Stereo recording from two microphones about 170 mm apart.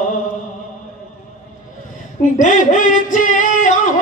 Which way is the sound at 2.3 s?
50° left (ahead or behind).